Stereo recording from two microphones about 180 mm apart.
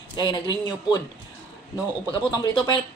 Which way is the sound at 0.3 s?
25° left (ahead or behind).